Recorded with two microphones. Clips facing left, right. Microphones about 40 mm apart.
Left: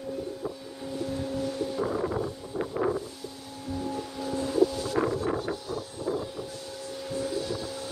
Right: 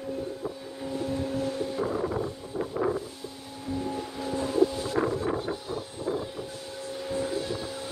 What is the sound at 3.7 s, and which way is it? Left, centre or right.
Boat, centre.